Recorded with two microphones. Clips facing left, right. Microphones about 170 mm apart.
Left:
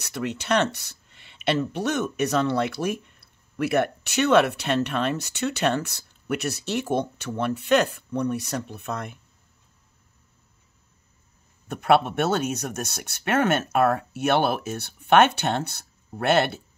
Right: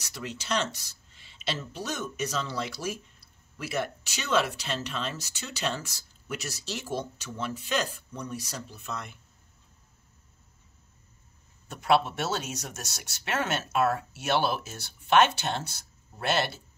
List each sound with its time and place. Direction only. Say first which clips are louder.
0.0 s speech: left 9 dB; 60° left (ahead or behind)
11.6 s speech: left 4 dB; 60° left (ahead or behind)